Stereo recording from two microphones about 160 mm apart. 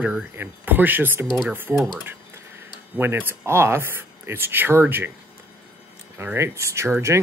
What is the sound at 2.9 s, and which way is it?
Speech, 15° right (ahead or behind).